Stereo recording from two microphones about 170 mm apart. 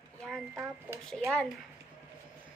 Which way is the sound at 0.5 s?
15° right (ahead or behind).